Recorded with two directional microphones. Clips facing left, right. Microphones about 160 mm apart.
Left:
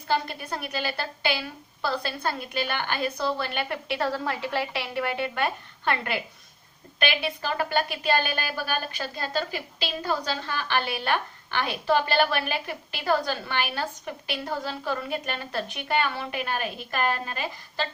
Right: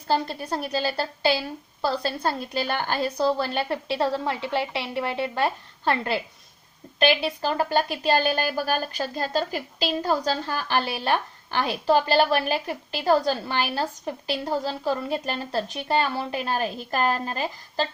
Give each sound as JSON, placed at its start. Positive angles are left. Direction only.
{"t": 0.1, "sound": "a woman's voice", "side_deg": -35}